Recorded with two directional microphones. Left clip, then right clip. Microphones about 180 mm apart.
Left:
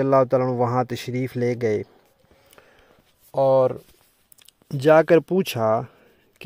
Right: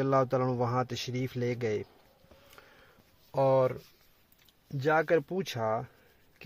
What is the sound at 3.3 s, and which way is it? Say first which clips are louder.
Speech: left 8 dB; 25° left (ahead or behind).